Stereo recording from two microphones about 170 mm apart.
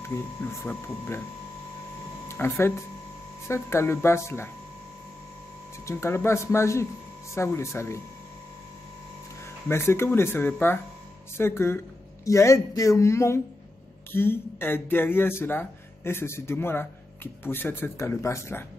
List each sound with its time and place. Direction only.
0.7 s speech: 10° left (ahead or behind)
2.2 s speech: 15° left (ahead or behind)
5.9 s speech: 15° left (ahead or behind)
9.7 s speech: 15° left (ahead or behind)